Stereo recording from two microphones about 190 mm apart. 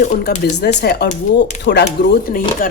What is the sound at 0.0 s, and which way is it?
Speech, 45° left (ahead or behind).